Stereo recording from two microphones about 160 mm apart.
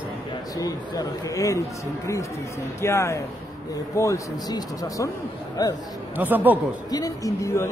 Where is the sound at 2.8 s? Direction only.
15° left (ahead or behind).